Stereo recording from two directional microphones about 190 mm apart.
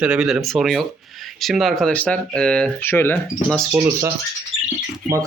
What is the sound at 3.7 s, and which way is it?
Speech, 15° right (ahead or behind).